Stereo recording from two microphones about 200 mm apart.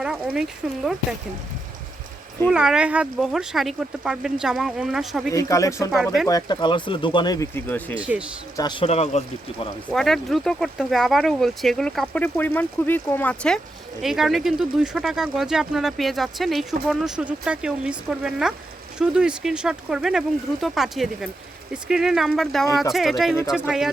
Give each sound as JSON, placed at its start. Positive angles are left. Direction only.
{"t": 0.0, "sound": "speech", "side_deg": -5}
{"t": 2.5, "sound": "speech", "side_deg": -5}
{"t": 5.3, "sound": "speech", "side_deg": 15}
{"t": 7.9, "sound": "a man's voice", "side_deg": -5}
{"t": 8.5, "sound": "speech", "side_deg": 20}
{"t": 9.9, "sound": "speech", "side_deg": 0}